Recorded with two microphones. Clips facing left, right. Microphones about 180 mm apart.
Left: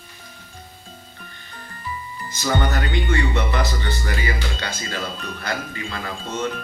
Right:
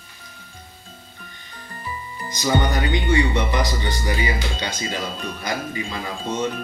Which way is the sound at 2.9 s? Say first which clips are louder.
Right 2 dB; 15° right (ahead or behind).